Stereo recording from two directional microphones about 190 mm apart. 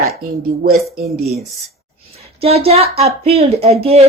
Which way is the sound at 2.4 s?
30° right (ahead or behind).